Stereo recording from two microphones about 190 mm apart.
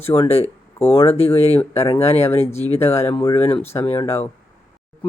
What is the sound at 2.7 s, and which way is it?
Speech, 15° left (ahead or behind).